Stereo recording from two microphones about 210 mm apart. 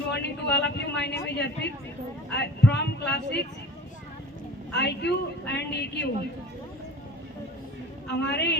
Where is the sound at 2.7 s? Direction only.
50° left (ahead or behind).